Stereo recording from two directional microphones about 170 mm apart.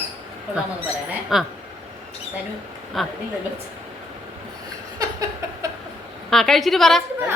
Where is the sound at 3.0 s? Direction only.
Centre (ahead or behind).